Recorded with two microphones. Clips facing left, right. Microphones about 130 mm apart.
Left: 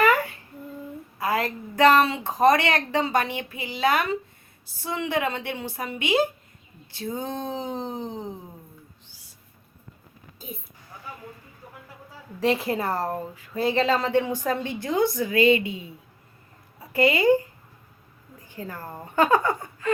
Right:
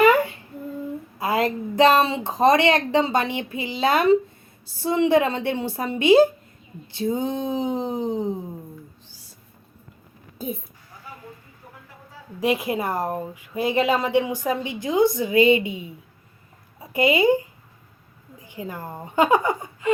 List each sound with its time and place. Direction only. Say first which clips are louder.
0.0 s humming: right 4 dB; 25° right (ahead or behind)
1.2 s a woman's voice: right 3 dB; 20° right (ahead or behind)
6.9 s speech: right 6 dB; 20° right (ahead or behind)
12.4 s speech: right 1 dB; 15° right (ahead or behind)
16.9 s speech: right 1 dB; 15° right (ahead or behind)
18.4 s speech: right 3 dB; 15° right (ahead or behind)